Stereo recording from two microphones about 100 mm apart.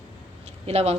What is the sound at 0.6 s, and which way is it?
Speech, 90° right.